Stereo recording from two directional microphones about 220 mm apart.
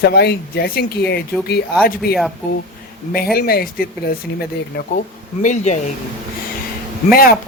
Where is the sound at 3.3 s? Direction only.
45° left (ahead or behind).